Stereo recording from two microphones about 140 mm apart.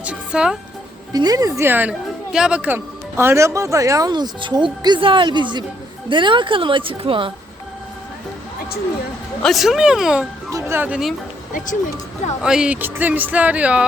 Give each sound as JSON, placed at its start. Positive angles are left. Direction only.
{"t": 0.0, "sound": "speech", "side_deg": -10}
{"t": 1.1, "sound": "a woman's voice", "side_deg": -25}
{"t": 9.4, "sound": "speech", "side_deg": 0}
{"t": 10.5, "sound": "speech", "side_deg": -15}
{"t": 11.5, "sound": "speech", "side_deg": 65}
{"t": 12.4, "sound": "speech", "side_deg": -5}